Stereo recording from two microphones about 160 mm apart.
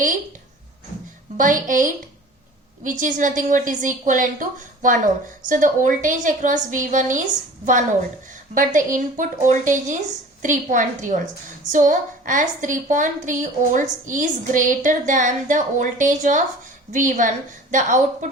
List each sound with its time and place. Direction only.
1.4 s a woman's voice: 55° right (ahead or behind)